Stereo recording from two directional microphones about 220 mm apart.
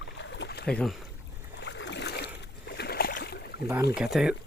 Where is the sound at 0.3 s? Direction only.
50° left (ahead or behind).